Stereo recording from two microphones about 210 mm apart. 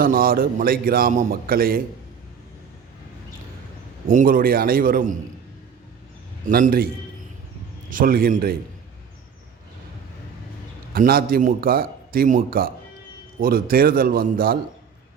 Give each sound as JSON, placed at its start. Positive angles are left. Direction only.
{"t": 0.0, "sound": "a man's voice", "side_deg": -45}
{"t": 4.1, "sound": "a man's voice", "side_deg": -40}
{"t": 6.5, "sound": "a man's voice", "side_deg": -45}
{"t": 7.9, "sound": "a man's voice", "side_deg": -40}
{"t": 10.9, "sound": "a man's voice", "side_deg": -45}